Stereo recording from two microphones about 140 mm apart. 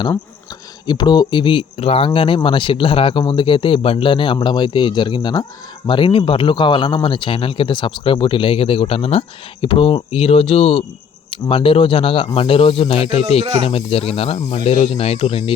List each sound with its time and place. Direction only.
0.9 s speech: 30° left (ahead or behind)